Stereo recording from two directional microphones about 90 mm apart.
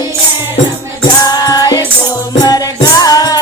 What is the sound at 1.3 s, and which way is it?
Music, 45° left (ahead or behind).